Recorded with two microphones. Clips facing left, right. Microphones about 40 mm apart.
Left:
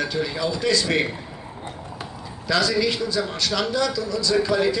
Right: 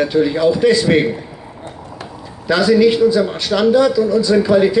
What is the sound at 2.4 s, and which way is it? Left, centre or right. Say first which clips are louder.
A man's voice: right 9 dB; right.